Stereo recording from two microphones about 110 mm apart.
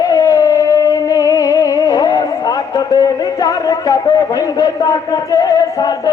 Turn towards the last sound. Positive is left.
turn(degrees=35)  # may be behind; listen again after turning